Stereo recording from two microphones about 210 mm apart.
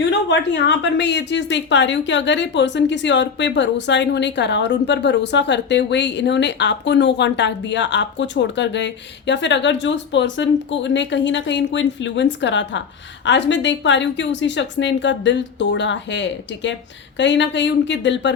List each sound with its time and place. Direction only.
0.0 s a woman's voice: 60° left (ahead or behind)